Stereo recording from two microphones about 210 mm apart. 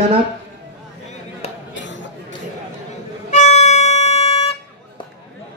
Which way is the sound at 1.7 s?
60° left (ahead or behind).